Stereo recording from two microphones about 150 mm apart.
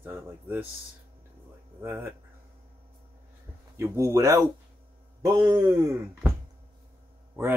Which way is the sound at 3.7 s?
20° right (ahead or behind).